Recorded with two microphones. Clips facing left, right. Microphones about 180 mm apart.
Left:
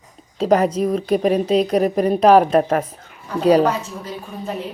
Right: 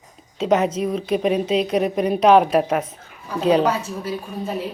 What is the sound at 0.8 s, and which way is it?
Speech, 45° left (ahead or behind).